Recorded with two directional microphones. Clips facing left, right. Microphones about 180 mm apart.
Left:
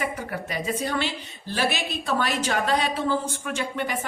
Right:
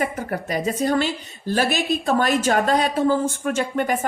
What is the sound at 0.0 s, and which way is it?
A woman's voice, 45° right (ahead or behind).